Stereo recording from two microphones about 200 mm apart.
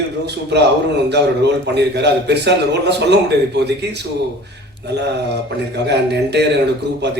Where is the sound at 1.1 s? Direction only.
60° right (ahead or behind).